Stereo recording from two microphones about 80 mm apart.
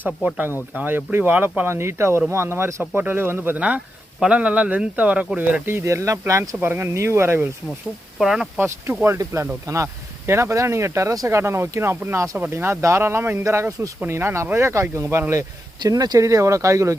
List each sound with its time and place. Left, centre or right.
0.2 s speech: centre
5.6 s speech: right
6.6 s speech: right
8.2 s speech: centre
9.0 s speech: right
15.8 s speech: right